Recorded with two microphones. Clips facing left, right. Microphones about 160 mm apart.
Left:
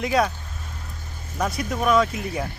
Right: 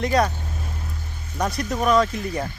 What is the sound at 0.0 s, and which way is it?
Speech, 5° left (ahead or behind).